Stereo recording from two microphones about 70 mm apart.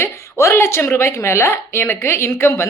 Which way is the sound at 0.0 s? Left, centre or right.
Left.